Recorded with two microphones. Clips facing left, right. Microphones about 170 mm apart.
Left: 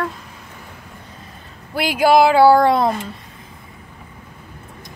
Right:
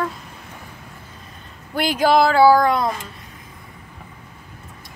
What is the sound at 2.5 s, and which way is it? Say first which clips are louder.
Speech: left 2 dB; 30° left (ahead or behind).